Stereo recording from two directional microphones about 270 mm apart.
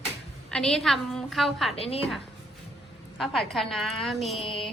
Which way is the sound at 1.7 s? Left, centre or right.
Left.